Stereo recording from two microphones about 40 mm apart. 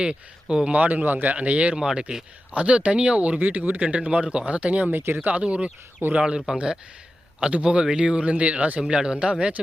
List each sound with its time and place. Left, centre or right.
0.0 s speech: right
0.7 s speech: right
1.8 s speech: centre
2.6 s speech: right
3.8 s speech: right
4.9 s speech: right
5.4 s speech: right
7.5 s speech: right
8.8 s speech: centre